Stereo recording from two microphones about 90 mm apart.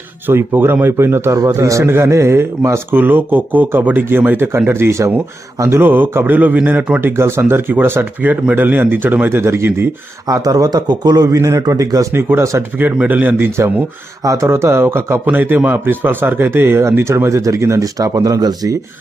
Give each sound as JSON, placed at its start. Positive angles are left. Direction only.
{"t": 0.3, "sound": "a man's voice", "side_deg": -25}
{"t": 1.4, "sound": "a man's voice", "side_deg": -40}
{"t": 7.0, "sound": "a man's voice", "side_deg": -25}
{"t": 10.2, "sound": "a man's voice", "side_deg": -40}
{"t": 12.7, "sound": "a man's voice", "side_deg": -20}
{"t": 14.4, "sound": "a man's voice", "side_deg": -30}